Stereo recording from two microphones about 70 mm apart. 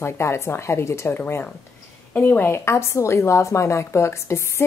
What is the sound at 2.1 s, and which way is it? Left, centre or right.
Speech, left.